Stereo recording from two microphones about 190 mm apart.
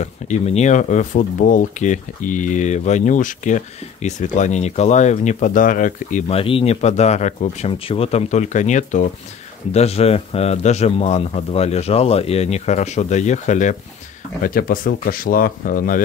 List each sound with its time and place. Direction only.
0.0 s speech: 35° left (ahead or behind)